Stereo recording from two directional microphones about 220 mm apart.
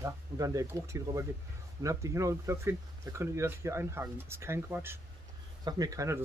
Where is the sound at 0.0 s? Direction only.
15° right (ahead or behind).